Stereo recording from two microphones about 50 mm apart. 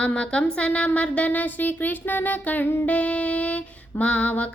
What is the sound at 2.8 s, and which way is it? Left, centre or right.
Female singing, left.